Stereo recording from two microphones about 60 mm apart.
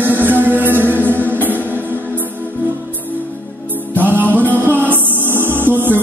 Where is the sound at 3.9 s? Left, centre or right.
Right.